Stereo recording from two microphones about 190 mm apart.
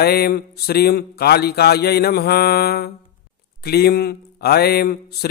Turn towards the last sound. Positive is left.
turn(degrees=55)  # may be behind; listen again after turning